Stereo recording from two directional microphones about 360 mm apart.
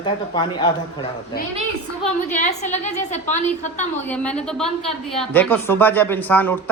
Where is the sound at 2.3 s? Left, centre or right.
Centre.